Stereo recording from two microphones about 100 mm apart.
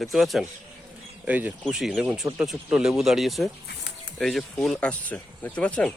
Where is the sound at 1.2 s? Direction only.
15° right (ahead or behind).